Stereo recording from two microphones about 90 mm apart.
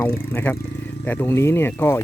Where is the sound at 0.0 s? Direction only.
25° left (ahead or behind).